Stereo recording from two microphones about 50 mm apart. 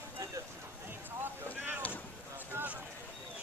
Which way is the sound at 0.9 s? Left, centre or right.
Right.